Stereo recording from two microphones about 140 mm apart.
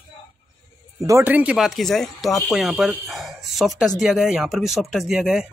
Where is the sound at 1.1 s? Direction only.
15° right (ahead or behind).